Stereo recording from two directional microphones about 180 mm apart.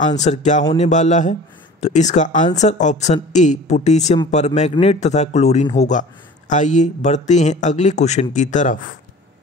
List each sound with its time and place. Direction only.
0.0 s speech: 40° left (ahead or behind)